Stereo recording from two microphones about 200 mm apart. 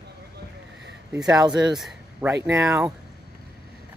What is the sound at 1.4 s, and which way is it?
Speech, 20° right (ahead or behind).